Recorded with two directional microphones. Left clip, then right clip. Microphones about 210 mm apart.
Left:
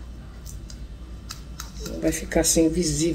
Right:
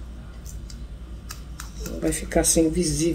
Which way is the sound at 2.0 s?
10° right (ahead or behind).